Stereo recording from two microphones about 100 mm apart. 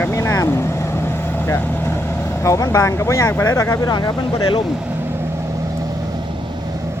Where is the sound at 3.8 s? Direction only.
40° left (ahead or behind).